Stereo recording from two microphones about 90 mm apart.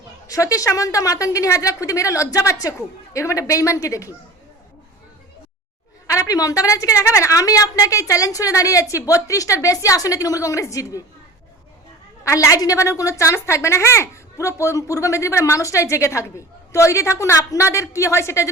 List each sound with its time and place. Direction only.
0.3 s a woman's voice: 40° left (ahead or behind)
6.1 s a woman's voice: 40° left (ahead or behind)
12.2 s a woman's voice: 35° left (ahead or behind)